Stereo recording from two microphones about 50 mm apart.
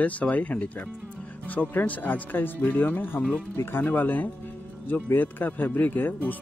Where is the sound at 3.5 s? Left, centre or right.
Left.